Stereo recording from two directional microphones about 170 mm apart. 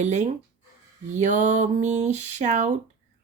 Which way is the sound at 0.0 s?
45° right (ahead or behind).